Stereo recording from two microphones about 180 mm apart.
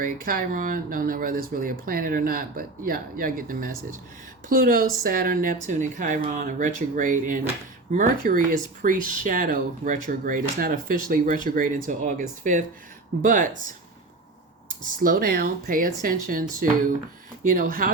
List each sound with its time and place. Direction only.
0.0 s speech: 50° right (ahead or behind)
14.9 s speech: 50° right (ahead or behind)